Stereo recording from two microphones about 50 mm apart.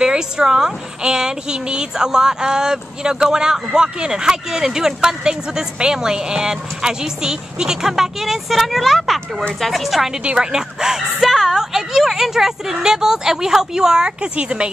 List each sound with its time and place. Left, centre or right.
0.0 s a woman's voice: centre
10.2 s a woman's voice: centre